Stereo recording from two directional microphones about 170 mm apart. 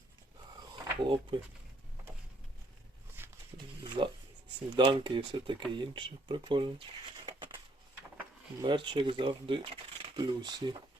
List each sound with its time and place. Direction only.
1.0 s speech: 30° right (ahead or behind)
3.2 s a sound: 10° right (ahead or behind)
3.8 s speech: 25° right (ahead or behind)
8.6 s speech: 25° right (ahead or behind)